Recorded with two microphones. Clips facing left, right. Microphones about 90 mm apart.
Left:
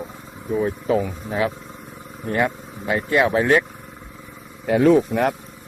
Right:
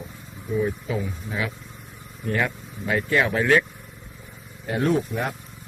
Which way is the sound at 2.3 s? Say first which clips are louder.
Left 5 dB; 25° left (ahead or behind).